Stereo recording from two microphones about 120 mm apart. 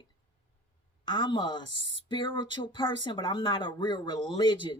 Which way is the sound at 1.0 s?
40° left (ahead or behind).